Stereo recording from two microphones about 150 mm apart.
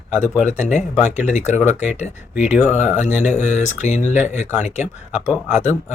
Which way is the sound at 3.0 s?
50° left (ahead or behind).